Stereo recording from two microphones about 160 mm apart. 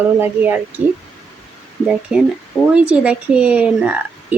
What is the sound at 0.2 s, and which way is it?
Speech, 10° right (ahead or behind).